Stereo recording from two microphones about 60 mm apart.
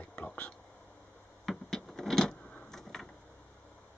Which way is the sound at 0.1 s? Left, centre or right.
Left.